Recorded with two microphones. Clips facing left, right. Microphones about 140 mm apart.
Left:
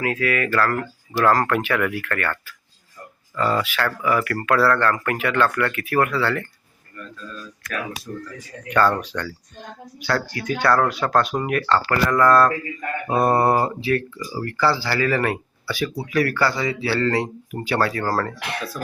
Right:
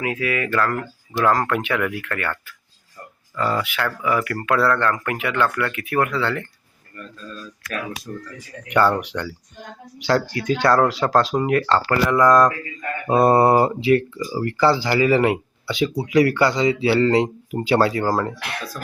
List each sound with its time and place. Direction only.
0.0 s speech: 20° right (ahead or behind)
8.7 s speech: 15° right (ahead or behind)
12.0 s speech: 10° right (ahead or behind)